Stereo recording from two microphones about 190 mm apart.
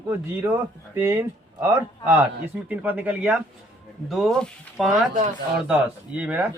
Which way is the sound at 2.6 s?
10° right (ahead or behind).